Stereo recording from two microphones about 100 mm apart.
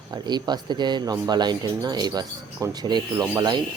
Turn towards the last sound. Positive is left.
turn(degrees=-45)  # may be behind; listen again after turning